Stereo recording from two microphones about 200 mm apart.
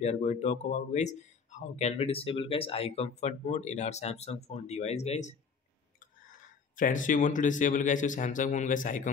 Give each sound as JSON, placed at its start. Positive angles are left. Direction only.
{"t": 0.0, "sound": "speech", "side_deg": 35}
{"t": 6.8, "sound": "speech", "side_deg": 40}